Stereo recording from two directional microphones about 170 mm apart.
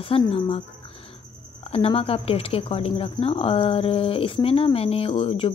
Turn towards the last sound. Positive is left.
turn(degrees=35)  # may be behind; listen again after turning